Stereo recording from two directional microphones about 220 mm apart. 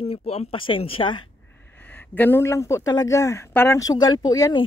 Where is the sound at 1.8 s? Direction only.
10° left (ahead or behind).